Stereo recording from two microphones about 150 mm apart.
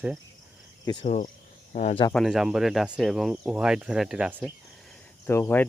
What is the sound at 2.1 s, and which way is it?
Speech, centre (ahead or behind).